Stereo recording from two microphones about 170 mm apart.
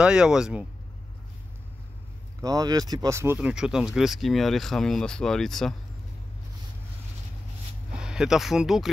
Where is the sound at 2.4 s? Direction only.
20° right (ahead or behind).